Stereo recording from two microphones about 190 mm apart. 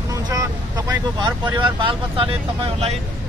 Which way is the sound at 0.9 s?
25° right (ahead or behind).